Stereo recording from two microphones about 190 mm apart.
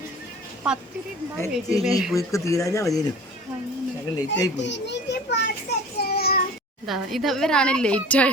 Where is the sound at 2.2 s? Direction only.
15° left (ahead or behind).